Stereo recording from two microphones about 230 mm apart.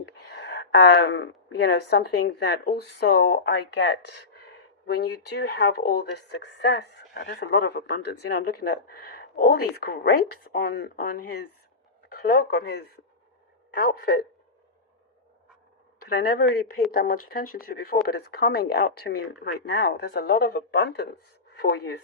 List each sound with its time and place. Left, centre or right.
0.4 s speech: left
16.0 s speech: left